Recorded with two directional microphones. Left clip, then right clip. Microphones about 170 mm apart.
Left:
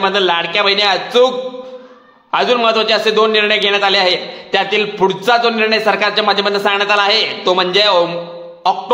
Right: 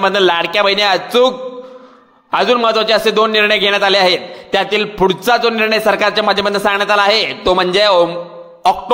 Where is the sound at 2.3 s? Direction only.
30° right (ahead or behind).